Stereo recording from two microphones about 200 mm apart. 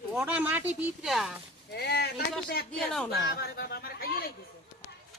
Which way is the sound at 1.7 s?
55° left (ahead or behind).